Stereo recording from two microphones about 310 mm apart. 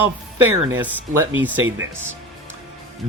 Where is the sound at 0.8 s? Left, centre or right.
Centre.